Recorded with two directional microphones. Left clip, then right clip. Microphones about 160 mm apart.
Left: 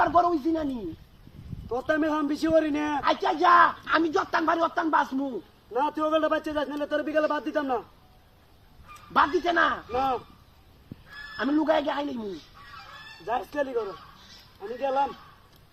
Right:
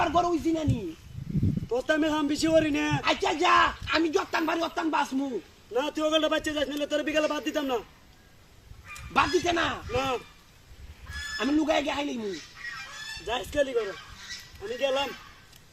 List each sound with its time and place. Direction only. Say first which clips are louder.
0.0 s a man's voice: left 3 dB; 15° right (ahead or behind)
1.7 s a man's voice: even; 5° right (ahead or behind)
4.2 s a sound: left 4 dB; 20° right (ahead or behind)
5.7 s a man's voice: left 1 dB; 15° right (ahead or behind)
9.1 s a man's voice: left 2 dB; 15° right (ahead or behind)
11.4 s a man's voice: left 2 dB; 10° right (ahead or behind)